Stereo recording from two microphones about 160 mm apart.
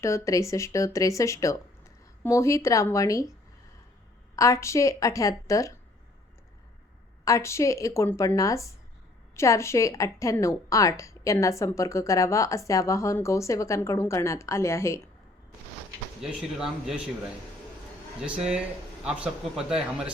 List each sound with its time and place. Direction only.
0.0 s a woman's voice: 20° left (ahead or behind)
4.4 s a woman's voice: 20° left (ahead or behind)
7.3 s a woman's voice: 20° left (ahead or behind)
16.2 s speech: 5° right (ahead or behind)
18.2 s a man's voice: 5° right (ahead or behind)